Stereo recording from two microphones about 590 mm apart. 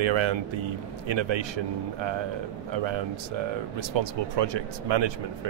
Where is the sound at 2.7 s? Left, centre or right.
Right.